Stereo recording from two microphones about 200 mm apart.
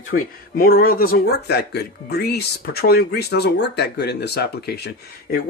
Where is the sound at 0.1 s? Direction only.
45° left (ahead or behind).